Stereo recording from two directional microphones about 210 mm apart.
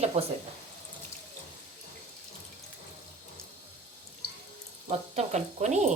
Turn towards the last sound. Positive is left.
turn(degrees=-35)  # may be behind; listen again after turning